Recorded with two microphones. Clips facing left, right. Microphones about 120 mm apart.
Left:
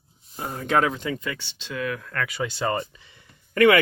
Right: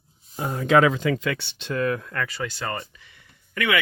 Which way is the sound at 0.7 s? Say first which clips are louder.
Right 5 dB; 90° right.